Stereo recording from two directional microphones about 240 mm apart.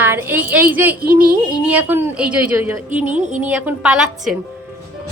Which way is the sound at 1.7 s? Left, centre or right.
Centre.